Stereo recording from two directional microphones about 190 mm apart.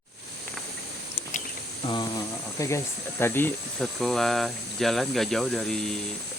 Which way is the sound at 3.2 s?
10° left (ahead or behind).